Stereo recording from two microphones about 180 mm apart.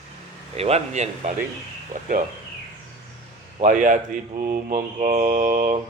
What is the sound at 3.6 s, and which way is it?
Speech, 45° right (ahead or behind).